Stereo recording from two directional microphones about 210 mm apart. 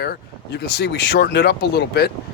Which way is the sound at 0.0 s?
50° left (ahead or behind).